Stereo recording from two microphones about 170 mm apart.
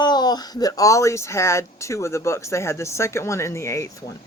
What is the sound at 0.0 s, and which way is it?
Speech, 25° left (ahead or behind).